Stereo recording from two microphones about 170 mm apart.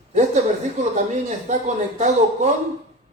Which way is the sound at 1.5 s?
45° right (ahead or behind).